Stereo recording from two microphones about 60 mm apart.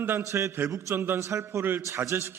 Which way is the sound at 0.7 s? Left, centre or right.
Right.